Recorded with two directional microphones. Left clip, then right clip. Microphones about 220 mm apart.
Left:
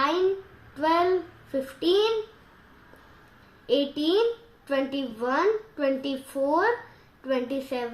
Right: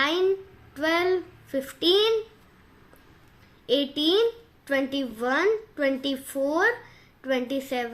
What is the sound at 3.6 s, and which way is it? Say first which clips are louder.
A woman's voice: right 1 dB; 35° right (ahead or behind).